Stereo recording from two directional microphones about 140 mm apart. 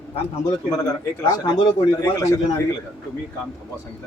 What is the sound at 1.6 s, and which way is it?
Speech, 25° left (ahead or behind).